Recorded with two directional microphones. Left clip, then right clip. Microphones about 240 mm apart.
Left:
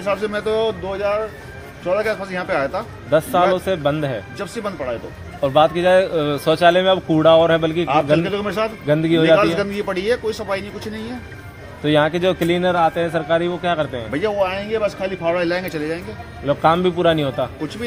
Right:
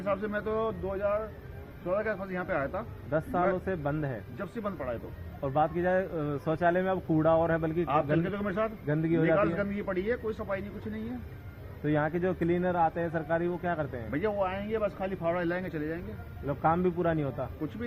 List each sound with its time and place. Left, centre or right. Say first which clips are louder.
0.0 s a man's voice: left 11 dB; centre
3.1 s a man's voice: left 13 dB; left
4.4 s a man's voice: left 11 dB; centre
5.4 s a man's voice: left 14 dB; left
8.2 s a man's voice: left 11 dB; centre
11.9 s speech: left 13 dB; left
14.1 s speech: left 10 dB; centre
16.5 s a man's voice: left 12 dB; left